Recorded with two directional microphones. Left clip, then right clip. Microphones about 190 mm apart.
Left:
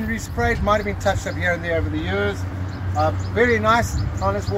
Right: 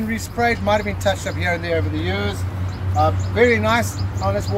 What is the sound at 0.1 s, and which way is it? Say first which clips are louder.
Speech: right 3 dB; 10° left (ahead or behind).